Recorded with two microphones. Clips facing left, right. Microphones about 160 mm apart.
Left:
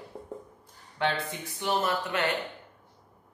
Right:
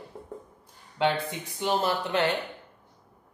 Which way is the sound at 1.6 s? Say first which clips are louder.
Right 2 dB; 25° right (ahead or behind).